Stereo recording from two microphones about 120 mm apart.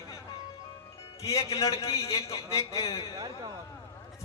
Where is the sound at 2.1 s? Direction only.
25° left (ahead or behind).